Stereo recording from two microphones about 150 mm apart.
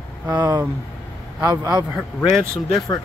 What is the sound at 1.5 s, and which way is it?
Speech, 25° right (ahead or behind).